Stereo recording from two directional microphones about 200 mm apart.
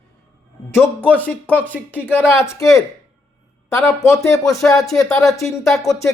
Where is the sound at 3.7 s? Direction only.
15° left (ahead or behind).